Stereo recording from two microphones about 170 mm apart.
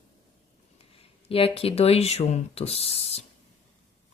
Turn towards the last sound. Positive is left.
turn(degrees=35)  # may be behind; listen again after turning